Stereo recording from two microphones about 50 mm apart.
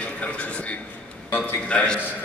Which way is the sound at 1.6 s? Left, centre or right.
Centre.